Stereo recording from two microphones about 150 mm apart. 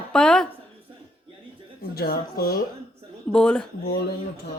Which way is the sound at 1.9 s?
90° left.